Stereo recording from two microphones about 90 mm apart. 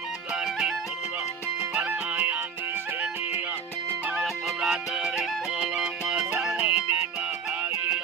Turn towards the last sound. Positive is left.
turn(degrees=-15)  # may be behind; listen again after turning